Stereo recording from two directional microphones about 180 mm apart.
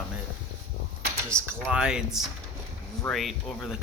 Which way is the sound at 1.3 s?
5° left (ahead or behind).